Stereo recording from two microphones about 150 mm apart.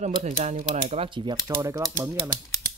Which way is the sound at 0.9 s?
35° right (ahead or behind).